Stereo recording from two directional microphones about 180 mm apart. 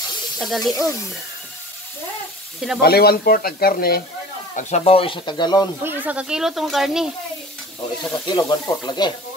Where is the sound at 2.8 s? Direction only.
60° left (ahead or behind).